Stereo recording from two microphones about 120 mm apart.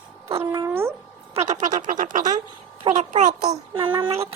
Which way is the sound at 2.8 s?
75° right (ahead or behind).